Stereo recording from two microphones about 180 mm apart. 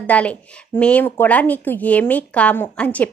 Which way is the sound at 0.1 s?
5° left (ahead or behind).